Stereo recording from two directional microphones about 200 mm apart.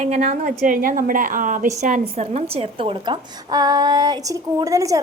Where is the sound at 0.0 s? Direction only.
35° right (ahead or behind).